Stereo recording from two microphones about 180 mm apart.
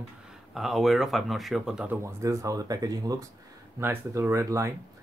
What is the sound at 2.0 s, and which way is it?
Speech, 15° right (ahead or behind).